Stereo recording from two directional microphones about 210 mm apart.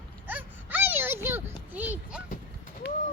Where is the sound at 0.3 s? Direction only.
10° right (ahead or behind).